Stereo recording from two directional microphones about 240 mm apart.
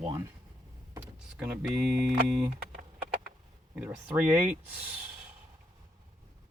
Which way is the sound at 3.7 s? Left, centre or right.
Centre.